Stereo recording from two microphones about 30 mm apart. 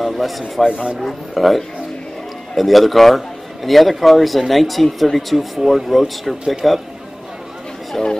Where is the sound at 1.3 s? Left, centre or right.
Centre.